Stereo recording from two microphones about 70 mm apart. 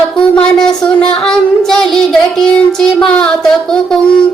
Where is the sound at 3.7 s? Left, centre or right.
Centre.